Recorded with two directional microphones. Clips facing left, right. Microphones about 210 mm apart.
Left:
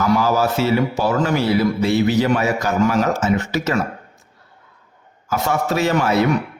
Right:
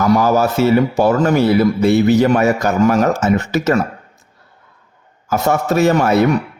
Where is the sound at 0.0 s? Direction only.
45° right (ahead or behind).